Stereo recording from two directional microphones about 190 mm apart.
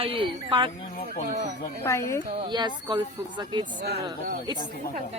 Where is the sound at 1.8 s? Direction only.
15° left (ahead or behind).